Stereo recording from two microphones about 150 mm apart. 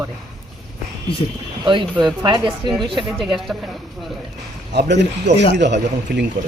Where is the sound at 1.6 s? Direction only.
30° right (ahead or behind).